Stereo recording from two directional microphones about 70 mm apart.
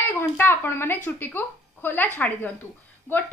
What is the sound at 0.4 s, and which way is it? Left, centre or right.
A woman's voice, left.